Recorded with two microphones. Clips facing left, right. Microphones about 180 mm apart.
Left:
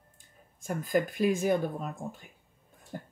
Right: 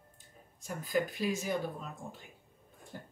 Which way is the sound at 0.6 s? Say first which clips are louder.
Left 4 dB; 50° left (ahead or behind).